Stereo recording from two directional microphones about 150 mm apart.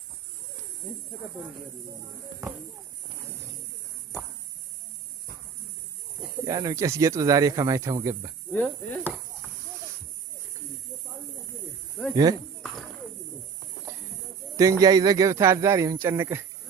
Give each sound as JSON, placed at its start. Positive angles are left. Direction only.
{"t": 6.4, "sound": "speech", "side_deg": -25}
{"t": 8.5, "sound": "cricket", "side_deg": 10}
{"t": 12.1, "sound": "speech", "side_deg": -25}
{"t": 14.5, "sound": "speech", "side_deg": -20}